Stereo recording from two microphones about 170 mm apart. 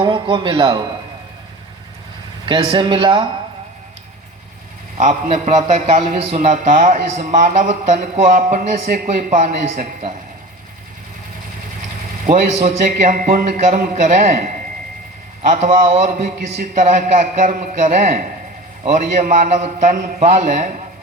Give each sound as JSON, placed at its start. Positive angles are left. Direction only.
{"t": 0.0, "sound": "a man's voice", "side_deg": -30}
{"t": 2.5, "sound": "a man's voice", "side_deg": -30}
{"t": 4.9, "sound": "a man's voice", "side_deg": -45}
{"t": 12.2, "sound": "a man's voice", "side_deg": -50}
{"t": 15.4, "sound": "a man's voice", "side_deg": -45}